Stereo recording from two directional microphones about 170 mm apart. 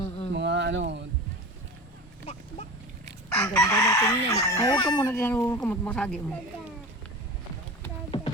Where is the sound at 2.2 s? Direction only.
40° left (ahead or behind).